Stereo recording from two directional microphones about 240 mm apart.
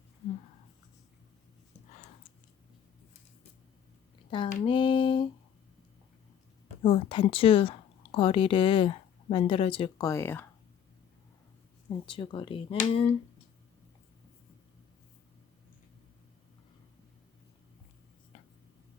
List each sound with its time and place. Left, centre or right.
4.3 s a sound: left
6.8 s speech: left
11.9 s speech: centre